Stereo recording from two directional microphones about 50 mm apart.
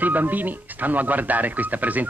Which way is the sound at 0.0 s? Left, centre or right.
Right.